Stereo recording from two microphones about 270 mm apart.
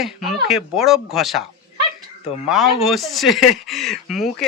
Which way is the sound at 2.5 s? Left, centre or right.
Centre.